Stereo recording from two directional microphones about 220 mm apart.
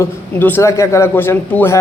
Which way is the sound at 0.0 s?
10° left (ahead or behind).